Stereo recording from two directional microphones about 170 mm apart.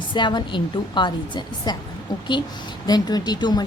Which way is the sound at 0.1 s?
25° left (ahead or behind).